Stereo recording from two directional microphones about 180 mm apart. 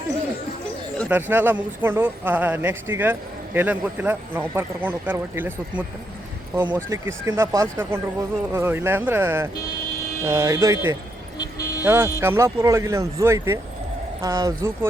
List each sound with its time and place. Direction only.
1.0 s speech: 10° right (ahead or behind)
11.3 s vehicle: 20° left (ahead or behind)
11.9 s speech: 15° right (ahead or behind)